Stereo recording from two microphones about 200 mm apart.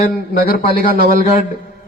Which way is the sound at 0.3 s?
45° left (ahead or behind).